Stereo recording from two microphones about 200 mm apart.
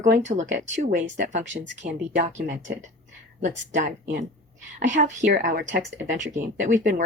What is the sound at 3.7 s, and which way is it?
Speech, 40° right (ahead or behind).